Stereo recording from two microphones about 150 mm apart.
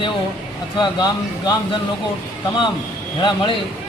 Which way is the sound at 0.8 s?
30° left (ahead or behind).